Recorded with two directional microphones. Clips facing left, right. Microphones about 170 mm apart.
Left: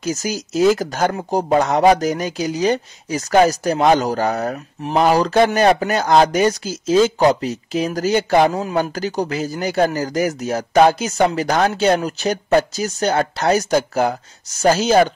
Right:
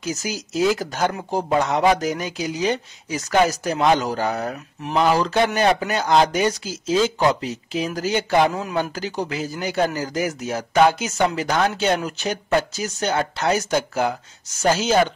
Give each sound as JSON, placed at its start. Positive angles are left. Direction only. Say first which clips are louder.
{"t": 0.0, "sound": "speech", "louder": "left 4 dB", "side_deg": 40}